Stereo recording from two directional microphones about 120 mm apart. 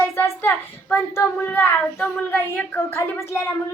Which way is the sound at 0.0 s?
20° left (ahead or behind).